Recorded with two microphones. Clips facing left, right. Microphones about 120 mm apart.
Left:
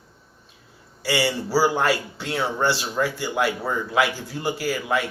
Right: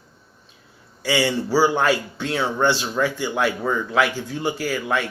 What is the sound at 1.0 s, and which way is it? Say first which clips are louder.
Speech: right 2 dB; 10° left (ahead or behind).